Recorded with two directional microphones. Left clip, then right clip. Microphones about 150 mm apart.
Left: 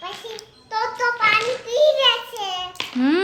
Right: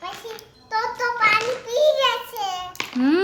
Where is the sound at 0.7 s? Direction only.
15° left (ahead or behind).